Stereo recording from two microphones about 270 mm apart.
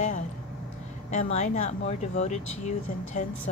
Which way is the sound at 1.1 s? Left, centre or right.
Left.